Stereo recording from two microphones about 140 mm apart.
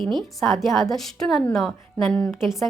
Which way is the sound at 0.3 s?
Centre (ahead or behind).